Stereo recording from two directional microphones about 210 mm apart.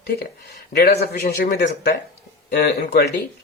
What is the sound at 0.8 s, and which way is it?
A man's voice, 50° left (ahead or behind).